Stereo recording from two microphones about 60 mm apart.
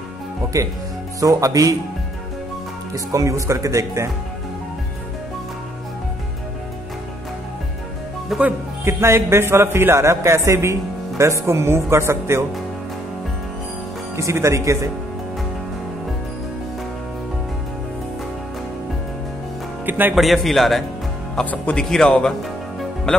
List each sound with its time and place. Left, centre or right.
0.5 s speech: right
2.9 s speech: right
8.3 s a man's voice: centre
8.8 s a man's voice: right
14.1 s speech: right
19.9 s speech: right
20.2 s a man's voice: centre